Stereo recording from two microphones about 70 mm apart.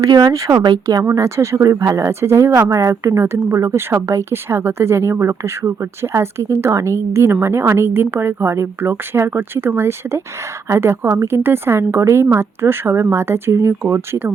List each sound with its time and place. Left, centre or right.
0.0 s speech: right
1.2 s speech: right